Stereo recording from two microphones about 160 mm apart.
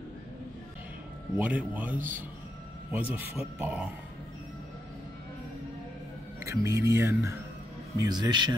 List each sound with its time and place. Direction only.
1.3 s speech: 10° right (ahead or behind)
2.0 s speech: 55° right (ahead or behind)
2.9 s speech: 10° right (ahead or behind)
6.4 s speech: 20° right (ahead or behind)